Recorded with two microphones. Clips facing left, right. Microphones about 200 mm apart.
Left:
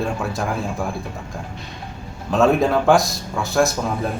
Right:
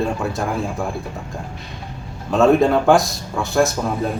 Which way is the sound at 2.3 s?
Centre (ahead or behind).